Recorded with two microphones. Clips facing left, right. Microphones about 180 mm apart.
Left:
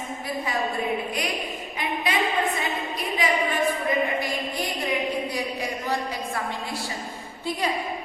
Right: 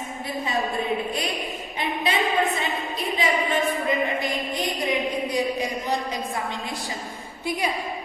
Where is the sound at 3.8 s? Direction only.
20° right (ahead or behind).